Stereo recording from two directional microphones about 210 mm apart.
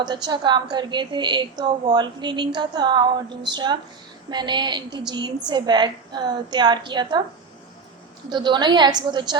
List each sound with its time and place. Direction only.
0.0 s a woman's voice: 20° right (ahead or behind)
8.3 s a woman's voice: 20° right (ahead or behind)